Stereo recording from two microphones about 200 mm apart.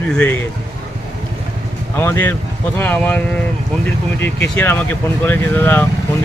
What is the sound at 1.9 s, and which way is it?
Speech, 10° left (ahead or behind).